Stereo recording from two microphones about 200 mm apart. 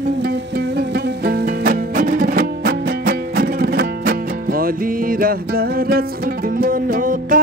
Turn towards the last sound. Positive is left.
turn(degrees=-45)  # may be behind; listen again after turning